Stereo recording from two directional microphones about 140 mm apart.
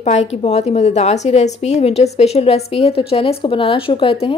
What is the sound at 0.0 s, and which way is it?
A woman's voice, 50° left (ahead or behind).